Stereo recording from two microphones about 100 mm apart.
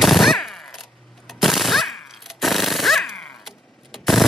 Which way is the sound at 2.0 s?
Centre (ahead or behind).